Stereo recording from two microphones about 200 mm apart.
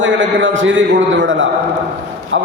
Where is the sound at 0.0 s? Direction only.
70° right (ahead or behind).